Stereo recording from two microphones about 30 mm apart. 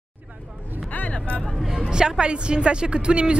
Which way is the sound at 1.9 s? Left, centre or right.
Right.